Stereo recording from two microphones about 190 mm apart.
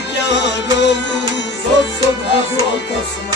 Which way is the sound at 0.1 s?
65° left (ahead or behind).